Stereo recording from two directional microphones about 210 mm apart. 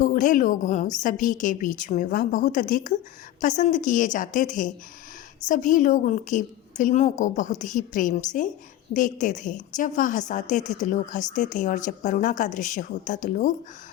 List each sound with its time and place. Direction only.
0.0 s a woman's voice: 40° left (ahead or behind)